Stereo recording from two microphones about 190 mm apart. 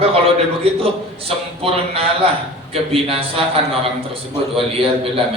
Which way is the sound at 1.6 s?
30° right (ahead or behind).